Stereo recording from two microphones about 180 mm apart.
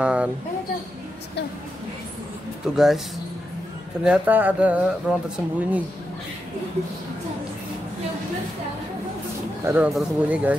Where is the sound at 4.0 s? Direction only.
5° right (ahead or behind).